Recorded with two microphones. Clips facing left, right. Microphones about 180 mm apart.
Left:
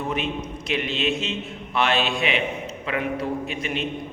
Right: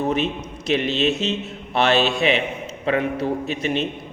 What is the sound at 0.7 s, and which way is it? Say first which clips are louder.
A man's voice: right 5 dB; 40° right (ahead or behind).